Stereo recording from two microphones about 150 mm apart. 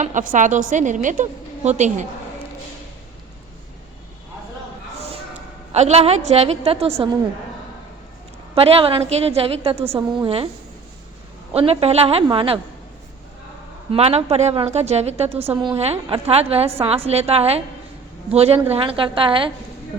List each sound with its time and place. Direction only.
0.0 s a woman's voice: 55° right (ahead or behind)
5.1 s a woman's voice: 50° right (ahead or behind)
8.5 s a woman's voice: 40° right (ahead or behind)
9.7 s a woman's voice: 15° right (ahead or behind)
10.2 s a woman's voice: 40° right (ahead or behind)
11.5 s a woman's voice: 40° right (ahead or behind)
13.9 s a woman's voice: 40° right (ahead or behind)